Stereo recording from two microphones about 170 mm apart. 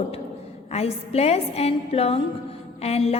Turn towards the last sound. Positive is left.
turn(degrees=35)  # may be behind; listen again after turning